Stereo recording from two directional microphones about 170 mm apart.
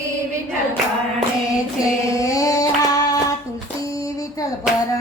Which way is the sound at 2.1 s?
20° left (ahead or behind).